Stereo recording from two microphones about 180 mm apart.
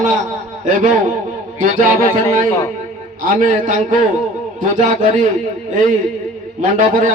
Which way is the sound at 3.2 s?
50° right (ahead or behind).